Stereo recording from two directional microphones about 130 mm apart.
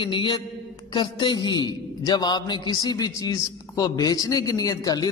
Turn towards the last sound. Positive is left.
turn(degrees=30)  # may be behind; listen again after turning